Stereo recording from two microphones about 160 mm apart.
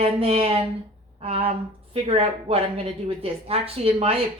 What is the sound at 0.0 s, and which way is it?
A woman's voice, 35° right (ahead or behind).